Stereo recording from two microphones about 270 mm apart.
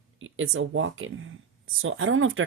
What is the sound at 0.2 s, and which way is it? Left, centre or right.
Speech, right.